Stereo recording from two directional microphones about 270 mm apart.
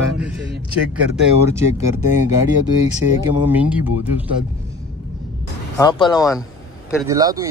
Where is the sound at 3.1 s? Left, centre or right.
Centre.